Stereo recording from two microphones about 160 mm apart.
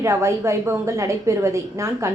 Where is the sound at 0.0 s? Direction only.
20° right (ahead or behind).